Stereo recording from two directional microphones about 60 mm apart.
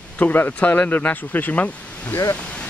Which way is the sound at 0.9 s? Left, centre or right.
Left.